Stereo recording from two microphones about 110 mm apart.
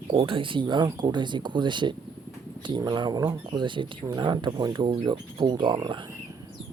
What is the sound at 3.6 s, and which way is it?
Speech, 50° right (ahead or behind).